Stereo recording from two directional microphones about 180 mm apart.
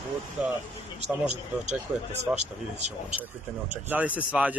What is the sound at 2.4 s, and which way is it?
Speech, 40° right (ahead or behind).